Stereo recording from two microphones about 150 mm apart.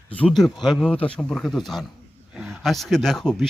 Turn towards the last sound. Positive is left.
turn(degrees=5)  # may be behind; listen again after turning